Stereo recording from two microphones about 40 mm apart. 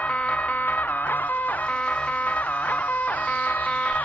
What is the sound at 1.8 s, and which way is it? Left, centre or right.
Music, left.